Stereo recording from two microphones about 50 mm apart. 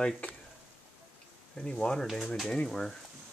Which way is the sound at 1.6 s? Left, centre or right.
Centre.